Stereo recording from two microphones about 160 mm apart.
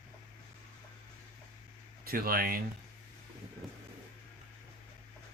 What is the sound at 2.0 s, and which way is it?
Speech, 65° right (ahead or behind).